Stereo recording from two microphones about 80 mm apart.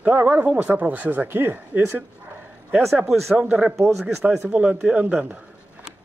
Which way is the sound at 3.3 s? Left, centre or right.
Centre.